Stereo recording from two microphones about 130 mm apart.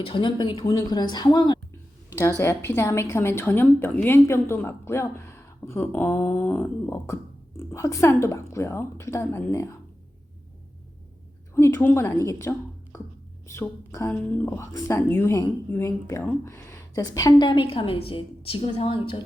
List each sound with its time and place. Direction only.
0.0 s speech: 40° left (ahead or behind)
2.4 s a woman's voice: 20° left (ahead or behind)
11.5 s a woman's voice: 20° left (ahead or behind)
17.3 s a woman's voice: 40° left (ahead or behind)